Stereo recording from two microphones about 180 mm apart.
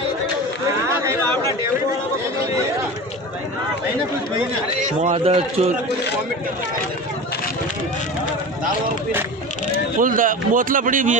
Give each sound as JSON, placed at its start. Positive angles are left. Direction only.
{"t": 4.7, "sound": "a man's voice", "side_deg": -40}
{"t": 9.9, "sound": "a man's voice", "side_deg": -50}